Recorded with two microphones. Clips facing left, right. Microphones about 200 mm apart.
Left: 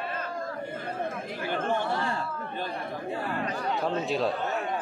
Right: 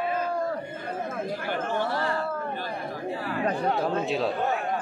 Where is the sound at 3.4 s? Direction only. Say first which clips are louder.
Right 7 dB; 55° right (ahead or behind).